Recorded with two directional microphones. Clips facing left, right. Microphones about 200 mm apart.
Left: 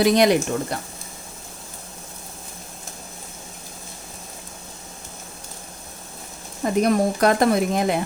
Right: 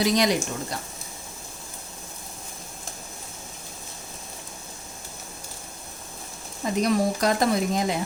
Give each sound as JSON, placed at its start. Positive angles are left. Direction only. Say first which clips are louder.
{"t": 0.0, "sound": "speech", "louder": "left 6 dB", "side_deg": 60}
{"t": 6.7, "sound": "speech", "louder": "left 4 dB", "side_deg": 55}